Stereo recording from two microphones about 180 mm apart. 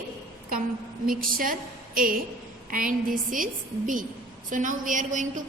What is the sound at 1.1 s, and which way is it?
A woman's voice, 50° right (ahead or behind).